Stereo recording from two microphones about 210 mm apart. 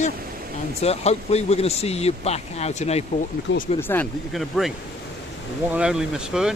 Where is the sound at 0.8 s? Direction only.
30° left (ahead or behind).